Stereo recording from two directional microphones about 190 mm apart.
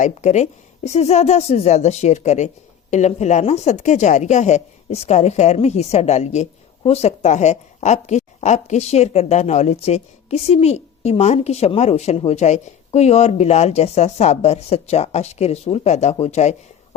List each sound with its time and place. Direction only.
0.0 s a woman's voice: 40° left (ahead or behind)